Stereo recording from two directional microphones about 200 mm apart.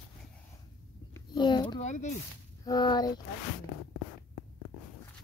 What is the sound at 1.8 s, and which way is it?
Speech, 35° left (ahead or behind).